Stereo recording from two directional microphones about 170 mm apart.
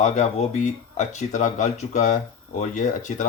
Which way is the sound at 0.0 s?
45° left (ahead or behind).